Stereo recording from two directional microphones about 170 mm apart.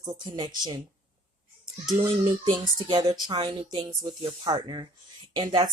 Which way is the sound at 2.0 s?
25° right (ahead or behind).